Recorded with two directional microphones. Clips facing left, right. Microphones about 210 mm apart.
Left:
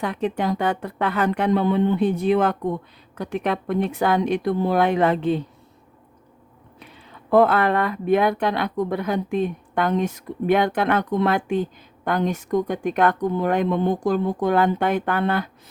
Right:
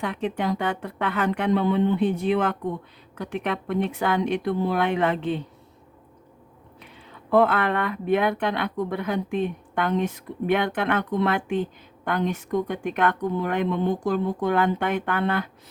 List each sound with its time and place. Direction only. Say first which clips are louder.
0.0 s speech: left 3 dB; 40° left (ahead or behind)
7.3 s speech: left 3 dB; 40° left (ahead or behind)